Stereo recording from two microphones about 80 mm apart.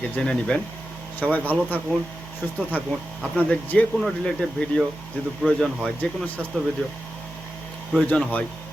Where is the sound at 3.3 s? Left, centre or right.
Centre.